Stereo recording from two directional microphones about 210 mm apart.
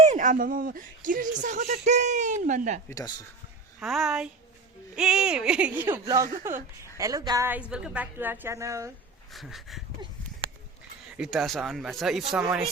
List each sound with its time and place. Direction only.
0.1 s speech: 35° right (ahead or behind)
3.8 s a woman's voice: centre (ahead or behind)
9.3 s speech: centre (ahead or behind)
11.2 s speech: centre (ahead or behind)